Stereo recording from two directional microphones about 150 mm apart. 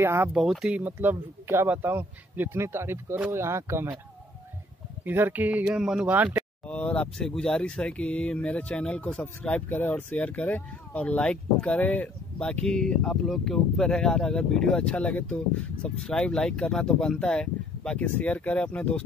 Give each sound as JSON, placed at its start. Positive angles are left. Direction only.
{"t": 0.0, "sound": "speech", "side_deg": -15}
{"t": 0.3, "sound": "speech", "side_deg": 0}
{"t": 5.0, "sound": "speech", "side_deg": -15}
{"t": 6.7, "sound": "speech", "side_deg": 10}